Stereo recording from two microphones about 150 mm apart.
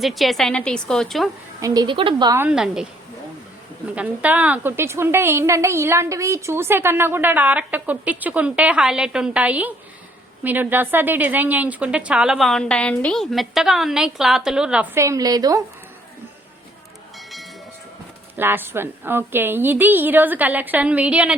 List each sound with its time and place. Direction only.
0.0 s a woman's voice: centre (ahead or behind)
1.6 s a woman's voice: 25° right (ahead or behind)
2.5 s a woman's voice: 5° right (ahead or behind)
3.8 s a woman's voice: 10° right (ahead or behind)
14.9 s a woman's voice: 20° right (ahead or behind)
17.2 s train: centre (ahead or behind)
18.3 s a woman's voice: 15° right (ahead or behind)